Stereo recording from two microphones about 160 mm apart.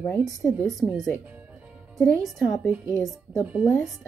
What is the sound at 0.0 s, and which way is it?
Speech, 5° left (ahead or behind).